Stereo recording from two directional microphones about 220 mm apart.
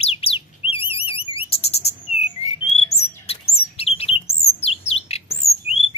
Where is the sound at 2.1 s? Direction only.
90° left.